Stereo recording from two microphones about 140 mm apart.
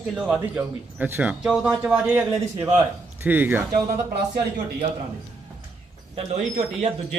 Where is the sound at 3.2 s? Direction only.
15° right (ahead or behind).